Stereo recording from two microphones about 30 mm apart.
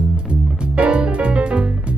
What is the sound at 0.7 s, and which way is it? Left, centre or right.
Music, right.